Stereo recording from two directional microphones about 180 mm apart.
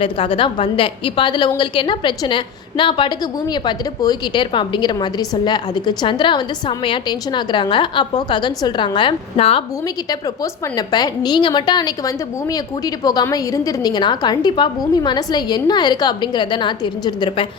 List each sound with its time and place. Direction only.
0.0 s a woman's voice: 30° left (ahead or behind)
10.1 s a woman's voice: 20° left (ahead or behind)